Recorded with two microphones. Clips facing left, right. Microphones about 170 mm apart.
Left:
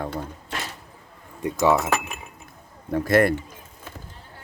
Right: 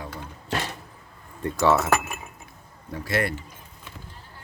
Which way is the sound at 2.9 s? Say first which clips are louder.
Left 8 dB; 50° left (ahead or behind).